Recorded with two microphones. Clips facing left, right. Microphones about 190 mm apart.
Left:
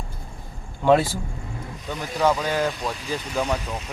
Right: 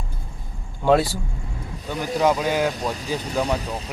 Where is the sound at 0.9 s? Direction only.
10° right (ahead or behind).